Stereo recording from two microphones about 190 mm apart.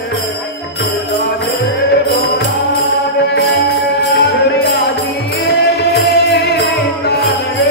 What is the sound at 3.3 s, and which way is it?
Music, 60° left (ahead or behind).